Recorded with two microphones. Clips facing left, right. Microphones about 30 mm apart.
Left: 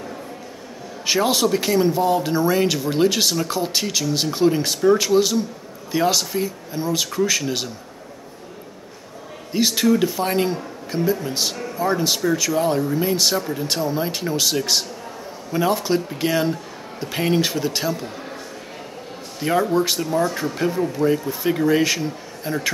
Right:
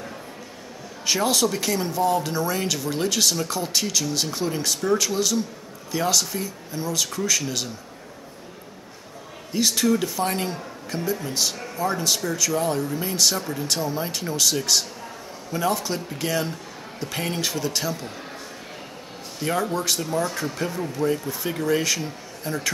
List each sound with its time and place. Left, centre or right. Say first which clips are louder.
1.0 s speech: left 3 dB; centre
9.5 s a man's voice: left 3 dB; centre
13.4 s a man's voice: left 3 dB; centre
19.4 s a man's voice: left 5 dB; centre
20.0 s a man's voice: left 4 dB; centre